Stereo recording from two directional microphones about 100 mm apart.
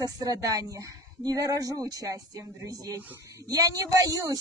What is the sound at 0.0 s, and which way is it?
Speech, 40° right (ahead or behind).